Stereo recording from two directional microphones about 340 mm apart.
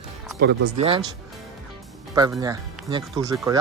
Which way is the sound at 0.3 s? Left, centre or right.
Right.